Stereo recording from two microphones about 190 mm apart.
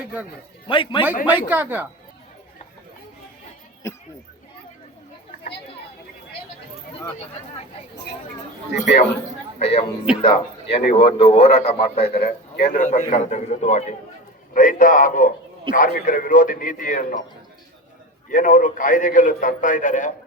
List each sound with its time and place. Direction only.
0.7 s a man's voice: 25° left (ahead or behind)
1.5 s a woman's voice: 10° right (ahead or behind)
3.8 s speech: 15° left (ahead or behind)
9.6 s a man's voice: 30° left (ahead or behind)
18.3 s a man's voice: 45° left (ahead or behind)